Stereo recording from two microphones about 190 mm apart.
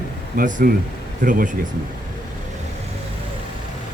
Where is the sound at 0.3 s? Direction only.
50° right (ahead or behind).